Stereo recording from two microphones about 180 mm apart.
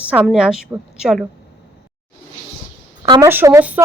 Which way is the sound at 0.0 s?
10° right (ahead or behind).